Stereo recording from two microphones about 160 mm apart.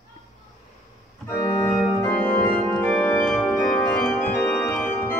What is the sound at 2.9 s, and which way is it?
Organ, 10° left (ahead or behind).